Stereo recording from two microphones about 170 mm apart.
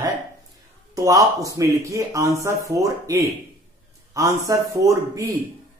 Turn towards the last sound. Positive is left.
turn(degrees=-20)  # may be behind; listen again after turning